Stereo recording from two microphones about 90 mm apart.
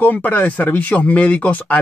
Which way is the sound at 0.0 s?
20° left (ahead or behind).